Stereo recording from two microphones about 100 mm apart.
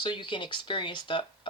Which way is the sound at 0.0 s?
55° left (ahead or behind).